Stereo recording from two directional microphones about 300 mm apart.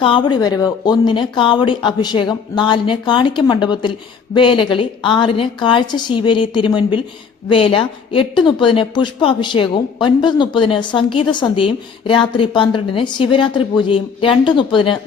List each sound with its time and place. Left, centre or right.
0.0 s a woman's voice: centre